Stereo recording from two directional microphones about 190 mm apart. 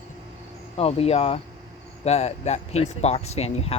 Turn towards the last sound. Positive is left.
turn(degrees=35)  # may be behind; listen again after turning